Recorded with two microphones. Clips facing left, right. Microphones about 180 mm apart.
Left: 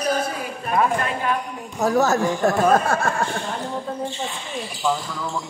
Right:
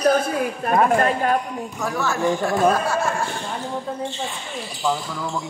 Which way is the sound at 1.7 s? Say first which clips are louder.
Left 7 dB; 40° left (ahead or behind).